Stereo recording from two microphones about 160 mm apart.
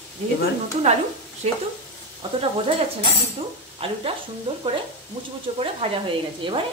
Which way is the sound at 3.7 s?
35° right (ahead or behind).